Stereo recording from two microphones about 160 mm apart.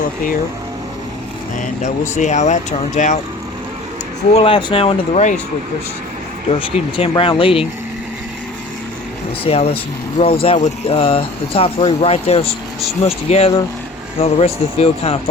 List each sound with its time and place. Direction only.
1.8 s speech: 50° left (ahead or behind)
4.4 s speech: 35° left (ahead or behind)
6.5 s speech: 35° left (ahead or behind)
9.4 s speech: 40° left (ahead or behind)